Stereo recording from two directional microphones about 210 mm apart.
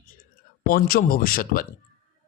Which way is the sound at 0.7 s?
45° left (ahead or behind).